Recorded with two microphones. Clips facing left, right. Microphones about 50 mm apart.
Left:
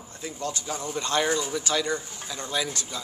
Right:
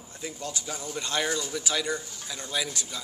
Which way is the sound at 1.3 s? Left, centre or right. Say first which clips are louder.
Left 4 dB; left.